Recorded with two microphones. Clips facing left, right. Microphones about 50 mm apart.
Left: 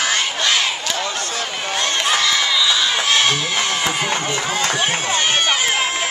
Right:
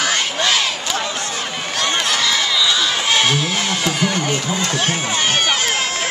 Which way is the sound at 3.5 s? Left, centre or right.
Centre.